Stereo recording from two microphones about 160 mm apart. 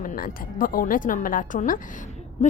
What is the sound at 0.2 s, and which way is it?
A woman's voice, 60° left (ahead or behind).